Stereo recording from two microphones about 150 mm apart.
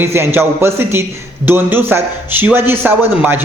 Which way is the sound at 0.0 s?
15° right (ahead or behind).